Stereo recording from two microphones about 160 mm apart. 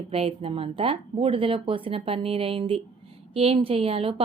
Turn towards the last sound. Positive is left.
turn(degrees=-35)  # may be behind; listen again after turning